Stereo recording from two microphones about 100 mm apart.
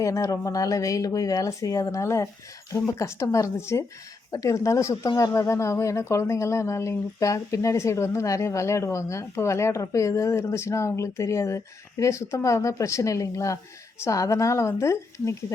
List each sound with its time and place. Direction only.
0.0 s speech: 35° left (ahead or behind)
5.0 s speech: 45° left (ahead or behind)
5.3 s speech: 30° left (ahead or behind)